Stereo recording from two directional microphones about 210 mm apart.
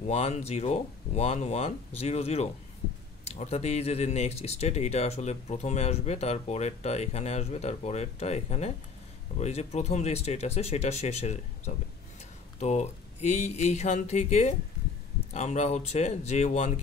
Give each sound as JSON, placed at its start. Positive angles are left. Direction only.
{"t": 0.0, "sound": "speech", "side_deg": 30}